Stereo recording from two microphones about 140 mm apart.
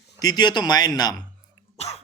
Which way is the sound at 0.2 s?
30° left (ahead or behind).